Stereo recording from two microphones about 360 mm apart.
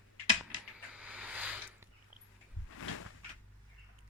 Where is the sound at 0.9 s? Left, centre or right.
Centre.